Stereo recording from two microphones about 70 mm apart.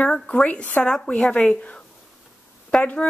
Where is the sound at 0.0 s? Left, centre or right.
Centre.